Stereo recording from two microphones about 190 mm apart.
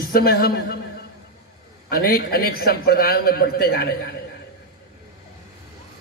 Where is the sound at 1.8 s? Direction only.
50° left (ahead or behind).